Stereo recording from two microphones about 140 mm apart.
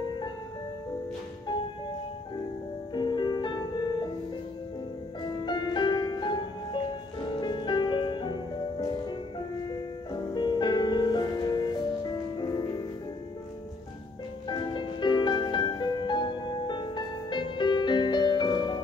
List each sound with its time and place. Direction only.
2.9 s music: 30° left (ahead or behind)
5.4 s music: 35° left (ahead or behind)
10.3 s music: 35° left (ahead or behind)
14.5 s music: 35° left (ahead or behind)